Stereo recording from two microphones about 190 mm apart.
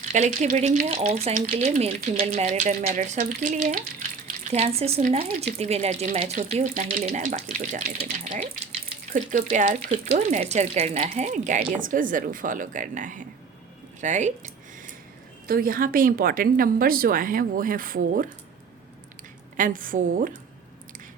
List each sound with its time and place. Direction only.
0.1 s speech: 40° right (ahead or behind)
9.1 s speech: 40° right (ahead or behind)
14.0 s a sound: 40° right (ahead or behind)
15.4 s speech: 50° right (ahead or behind)
19.5 s speech: 45° right (ahead or behind)